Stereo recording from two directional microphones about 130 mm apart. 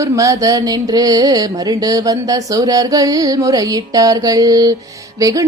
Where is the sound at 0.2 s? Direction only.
25° right (ahead or behind).